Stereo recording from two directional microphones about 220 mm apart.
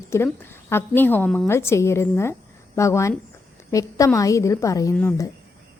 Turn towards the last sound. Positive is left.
turn(degrees=15)  # may be behind; listen again after turning